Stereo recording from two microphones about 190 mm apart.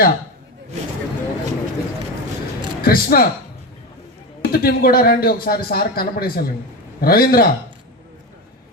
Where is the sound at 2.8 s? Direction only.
50° left (ahead or behind).